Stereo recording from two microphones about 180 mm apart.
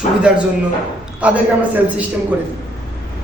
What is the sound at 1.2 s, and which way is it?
Speech, 5° right (ahead or behind).